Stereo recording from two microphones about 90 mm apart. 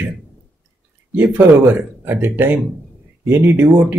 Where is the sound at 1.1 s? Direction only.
20° right (ahead or behind).